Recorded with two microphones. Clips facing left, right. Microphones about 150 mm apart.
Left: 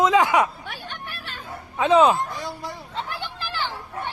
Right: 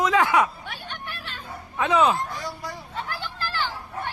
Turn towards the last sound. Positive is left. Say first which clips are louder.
# even
turn(degrees=15)  # may be behind; listen again after turning